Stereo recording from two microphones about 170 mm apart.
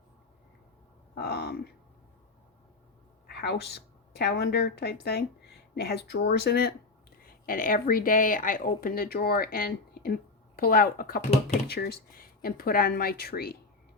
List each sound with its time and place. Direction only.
1.1 s a sound: 75° left (ahead or behind)
3.2 s a woman's voice: 70° left (ahead or behind)
7.4 s speech: 55° left (ahead or behind)